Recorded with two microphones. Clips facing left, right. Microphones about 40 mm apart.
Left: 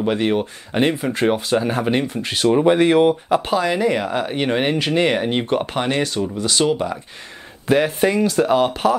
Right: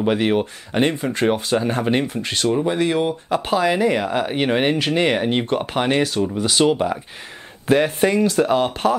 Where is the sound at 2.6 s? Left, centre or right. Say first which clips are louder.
Left 9 dB; left.